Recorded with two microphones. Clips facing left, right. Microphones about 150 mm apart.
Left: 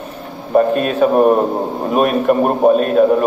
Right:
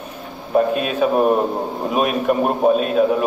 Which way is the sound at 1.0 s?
40° left (ahead or behind).